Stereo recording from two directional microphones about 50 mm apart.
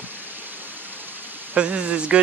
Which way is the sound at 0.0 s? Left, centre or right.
Right.